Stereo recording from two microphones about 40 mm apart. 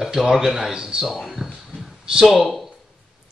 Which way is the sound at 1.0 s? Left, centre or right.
Centre.